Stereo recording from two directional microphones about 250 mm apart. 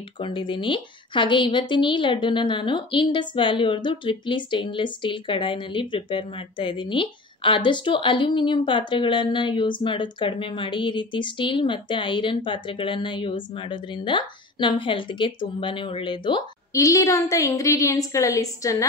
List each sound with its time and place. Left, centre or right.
0.2 s a woman's voice: centre